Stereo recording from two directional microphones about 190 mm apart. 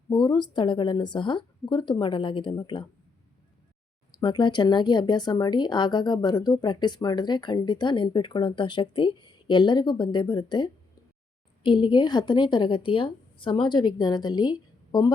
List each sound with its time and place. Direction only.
0.1 s a woman's voice: 25° left (ahead or behind)
4.2 s a woman's voice: 25° left (ahead or behind)